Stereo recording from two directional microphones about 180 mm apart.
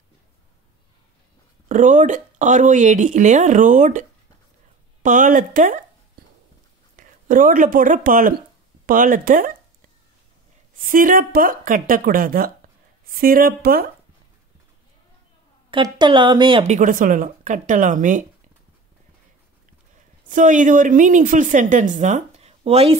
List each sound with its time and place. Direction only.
1.7 s a woman's voice: 45° right (ahead or behind)
5.0 s a woman's voice: 45° right (ahead or behind)
7.0 s a woman's voice: 50° right (ahead or behind)
10.9 s a woman's voice: 50° right (ahead or behind)
15.7 s a woman's voice: 25° right (ahead or behind)
16.7 s a woman's voice: 45° right (ahead or behind)
20.2 s a woman's voice: 45° right (ahead or behind)